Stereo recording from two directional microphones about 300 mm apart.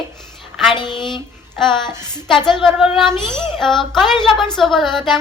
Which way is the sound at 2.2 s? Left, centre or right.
Centre.